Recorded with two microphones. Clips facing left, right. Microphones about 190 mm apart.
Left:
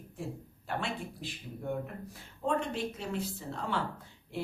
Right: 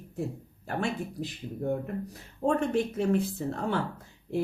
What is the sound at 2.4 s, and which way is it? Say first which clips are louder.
Speech: right 5 dB; 45° right (ahead or behind).